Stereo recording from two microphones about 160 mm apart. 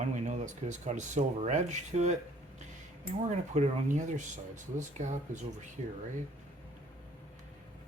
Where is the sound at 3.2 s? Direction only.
45° right (ahead or behind).